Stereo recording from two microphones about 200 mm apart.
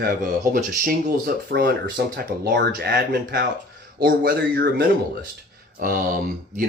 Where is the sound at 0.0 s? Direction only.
45° right (ahead or behind).